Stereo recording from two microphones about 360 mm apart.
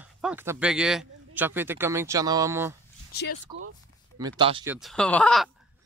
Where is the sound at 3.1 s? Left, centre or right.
Left.